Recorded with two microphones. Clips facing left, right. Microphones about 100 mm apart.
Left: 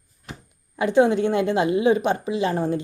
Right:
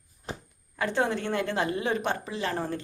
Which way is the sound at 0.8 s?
15° left (ahead or behind).